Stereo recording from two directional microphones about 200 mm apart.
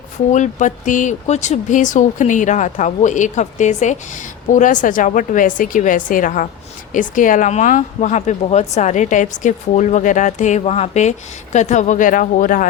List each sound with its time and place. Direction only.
0.3 s speech: 40° left (ahead or behind)